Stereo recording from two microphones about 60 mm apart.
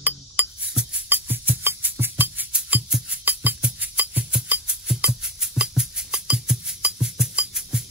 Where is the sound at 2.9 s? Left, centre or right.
Centre.